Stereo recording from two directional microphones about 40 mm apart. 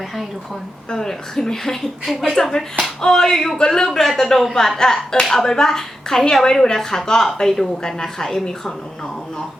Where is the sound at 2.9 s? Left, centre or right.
Centre.